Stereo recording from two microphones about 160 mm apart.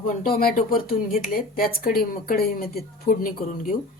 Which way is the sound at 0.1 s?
60° left (ahead or behind).